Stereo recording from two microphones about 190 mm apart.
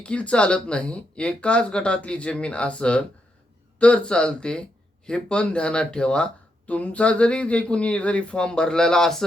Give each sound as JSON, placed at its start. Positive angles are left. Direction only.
{"t": 0.0, "sound": "speech", "side_deg": 5}